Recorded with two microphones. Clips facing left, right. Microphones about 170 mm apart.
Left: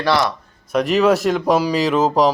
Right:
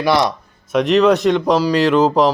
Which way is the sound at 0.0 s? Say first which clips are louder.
Right 2 dB; 15° right (ahead or behind).